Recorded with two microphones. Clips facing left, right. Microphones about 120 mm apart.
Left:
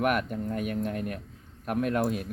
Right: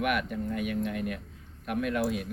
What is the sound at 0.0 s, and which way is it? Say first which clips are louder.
Speech: left 2 dB; 40° left (ahead or behind).